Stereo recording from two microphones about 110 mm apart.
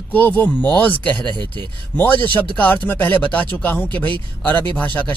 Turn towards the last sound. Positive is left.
turn(degrees=15)  # may be behind; listen again after turning